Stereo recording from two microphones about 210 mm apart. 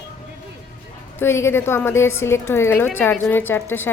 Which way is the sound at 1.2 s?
10° left (ahead or behind).